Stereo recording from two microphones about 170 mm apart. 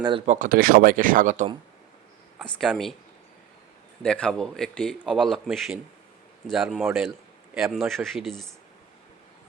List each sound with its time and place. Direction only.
0.3 s speech: 50° right (ahead or behind)
2.4 s a man's voice: centre (ahead or behind)
4.0 s a man's voice: 5° left (ahead or behind)